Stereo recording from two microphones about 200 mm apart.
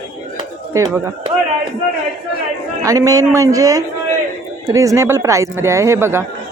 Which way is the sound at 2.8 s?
15° right (ahead or behind).